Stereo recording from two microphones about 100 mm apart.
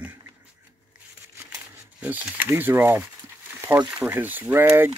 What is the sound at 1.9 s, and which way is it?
Speech, 15° right (ahead or behind).